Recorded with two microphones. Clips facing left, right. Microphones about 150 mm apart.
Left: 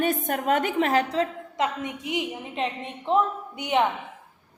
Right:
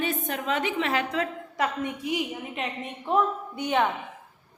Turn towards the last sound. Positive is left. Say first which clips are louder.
# left 1 dB
turn(degrees=20)  # may be behind; listen again after turning